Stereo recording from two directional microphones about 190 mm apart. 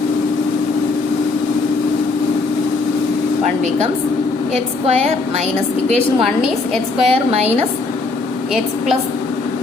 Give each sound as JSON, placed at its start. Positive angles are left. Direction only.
{"t": 7.0, "sound": "a woman's voice", "side_deg": -35}